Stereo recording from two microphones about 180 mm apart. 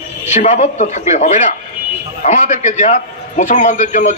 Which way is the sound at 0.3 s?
40° left (ahead or behind).